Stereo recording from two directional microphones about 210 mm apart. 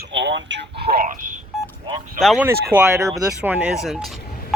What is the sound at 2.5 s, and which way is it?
Speech, 10° right (ahead or behind).